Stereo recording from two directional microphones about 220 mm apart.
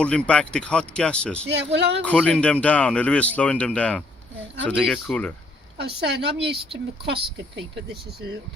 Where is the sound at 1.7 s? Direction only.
50° right (ahead or behind).